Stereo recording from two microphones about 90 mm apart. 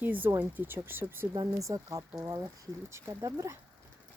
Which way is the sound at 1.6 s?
40° right (ahead or behind).